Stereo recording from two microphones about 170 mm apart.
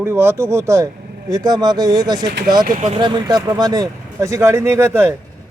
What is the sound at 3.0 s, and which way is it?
Speech, 25° right (ahead or behind).